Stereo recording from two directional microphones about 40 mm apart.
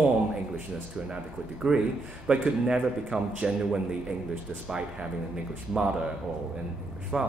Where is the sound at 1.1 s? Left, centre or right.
Centre.